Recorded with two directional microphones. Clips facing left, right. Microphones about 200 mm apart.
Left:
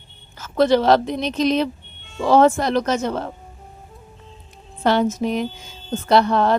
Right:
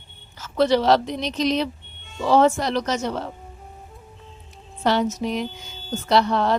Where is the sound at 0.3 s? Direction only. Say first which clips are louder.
Left 3 dB; 50° left (ahead or behind).